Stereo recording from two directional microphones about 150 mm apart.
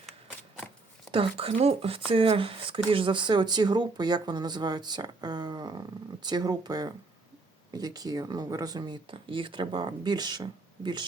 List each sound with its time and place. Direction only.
1.1 s speech: 35° right (ahead or behind)